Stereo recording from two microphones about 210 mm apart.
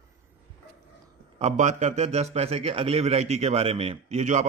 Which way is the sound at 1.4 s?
35° right (ahead or behind).